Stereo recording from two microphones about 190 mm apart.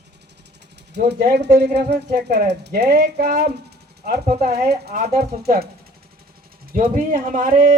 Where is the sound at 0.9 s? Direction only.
60° right (ahead or behind).